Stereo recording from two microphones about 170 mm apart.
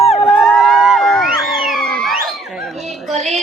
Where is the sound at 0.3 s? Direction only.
Centre (ahead or behind).